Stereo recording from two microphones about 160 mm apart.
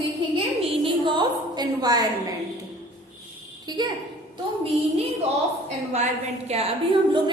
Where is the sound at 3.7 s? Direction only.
25° right (ahead or behind).